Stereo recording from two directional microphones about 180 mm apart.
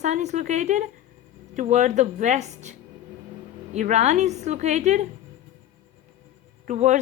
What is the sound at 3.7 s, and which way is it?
Speech, 40° right (ahead or behind).